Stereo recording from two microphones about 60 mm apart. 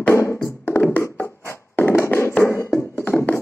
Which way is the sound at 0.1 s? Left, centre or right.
Left.